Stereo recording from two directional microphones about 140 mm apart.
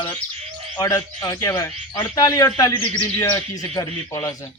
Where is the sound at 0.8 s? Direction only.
25° left (ahead or behind).